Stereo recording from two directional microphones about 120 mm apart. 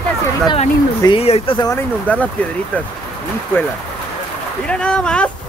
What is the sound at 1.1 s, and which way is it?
Speech, 55° left (ahead or behind).